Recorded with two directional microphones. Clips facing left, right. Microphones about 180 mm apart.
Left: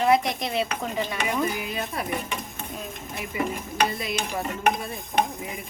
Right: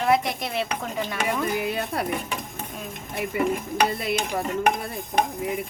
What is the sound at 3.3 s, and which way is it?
Speech, 60° right (ahead or behind).